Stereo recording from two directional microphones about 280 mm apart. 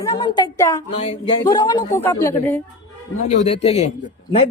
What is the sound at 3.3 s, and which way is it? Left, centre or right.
Speech, left.